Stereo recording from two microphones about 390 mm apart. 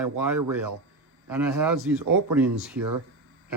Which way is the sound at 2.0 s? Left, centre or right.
Right.